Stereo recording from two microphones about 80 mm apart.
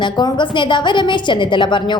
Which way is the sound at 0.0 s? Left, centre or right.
Left.